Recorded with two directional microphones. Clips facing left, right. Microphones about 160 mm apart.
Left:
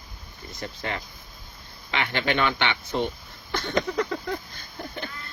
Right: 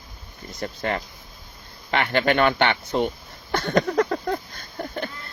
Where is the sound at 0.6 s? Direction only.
50° right (ahead or behind).